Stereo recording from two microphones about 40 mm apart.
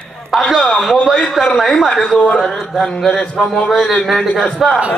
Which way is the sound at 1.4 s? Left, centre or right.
Centre.